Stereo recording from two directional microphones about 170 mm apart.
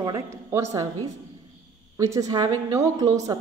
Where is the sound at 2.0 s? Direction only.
20° right (ahead or behind).